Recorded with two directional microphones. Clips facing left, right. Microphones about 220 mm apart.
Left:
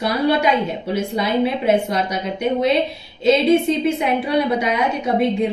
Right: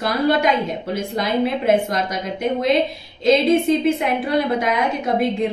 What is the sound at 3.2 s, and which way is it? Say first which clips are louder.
Speech: left 1 dB; centre (ahead or behind).